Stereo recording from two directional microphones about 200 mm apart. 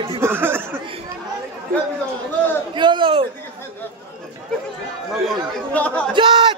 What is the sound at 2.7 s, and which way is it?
Speech, 25° right (ahead or behind).